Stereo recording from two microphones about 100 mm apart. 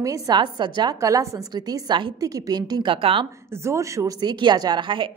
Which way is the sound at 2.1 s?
40° right (ahead or behind).